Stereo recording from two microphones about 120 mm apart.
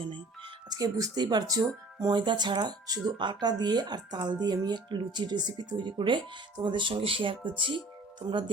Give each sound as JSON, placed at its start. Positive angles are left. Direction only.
{"t": 0.7, "sound": "speech", "side_deg": -30}